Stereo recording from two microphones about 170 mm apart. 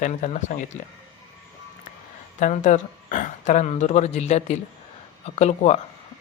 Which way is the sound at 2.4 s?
50° left (ahead or behind).